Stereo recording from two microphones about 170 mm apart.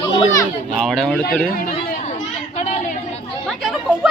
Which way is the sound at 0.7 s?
5° left (ahead or behind).